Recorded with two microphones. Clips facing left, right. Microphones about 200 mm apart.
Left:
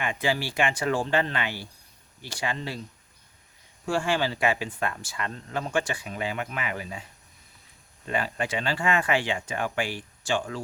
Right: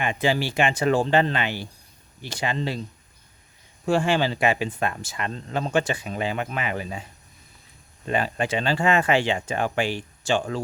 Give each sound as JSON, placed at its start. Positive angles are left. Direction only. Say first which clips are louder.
{"t": 0.0, "sound": "speech", "louder": "right 4 dB", "side_deg": -20}
{"t": 3.8, "sound": "speech", "louder": "right 4 dB", "side_deg": -20}